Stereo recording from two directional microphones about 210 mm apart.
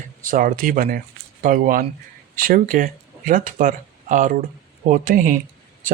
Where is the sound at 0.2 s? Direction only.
40° right (ahead or behind).